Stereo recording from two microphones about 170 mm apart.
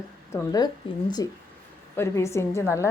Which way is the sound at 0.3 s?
20° left (ahead or behind).